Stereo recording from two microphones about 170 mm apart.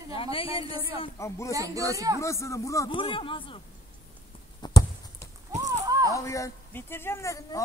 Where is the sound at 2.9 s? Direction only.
30° left (ahead or behind).